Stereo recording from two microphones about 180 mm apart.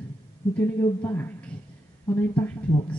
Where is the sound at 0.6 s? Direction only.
15° left (ahead or behind).